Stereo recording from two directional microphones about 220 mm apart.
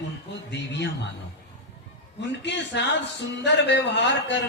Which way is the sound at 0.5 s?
50° left (ahead or behind).